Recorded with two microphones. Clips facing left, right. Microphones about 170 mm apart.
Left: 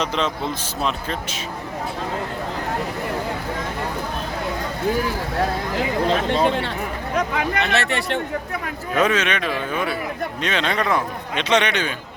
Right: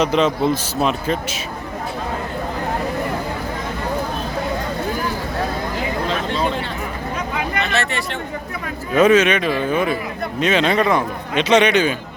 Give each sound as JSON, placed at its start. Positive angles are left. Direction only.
{"t": 0.0, "sound": "a man's voice", "side_deg": -5}
{"t": 6.3, "sound": "speech", "side_deg": 70}
{"t": 9.0, "sound": "a man's voice", "side_deg": -5}